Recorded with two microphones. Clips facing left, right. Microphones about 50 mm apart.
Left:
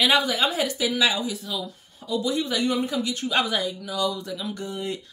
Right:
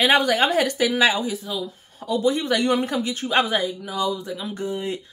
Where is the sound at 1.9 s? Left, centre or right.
Right.